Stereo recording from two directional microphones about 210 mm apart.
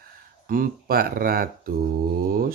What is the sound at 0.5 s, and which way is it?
Speech, 45° right (ahead or behind).